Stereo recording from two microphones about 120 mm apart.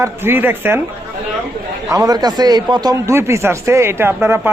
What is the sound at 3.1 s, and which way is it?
Speech, 20° right (ahead or behind).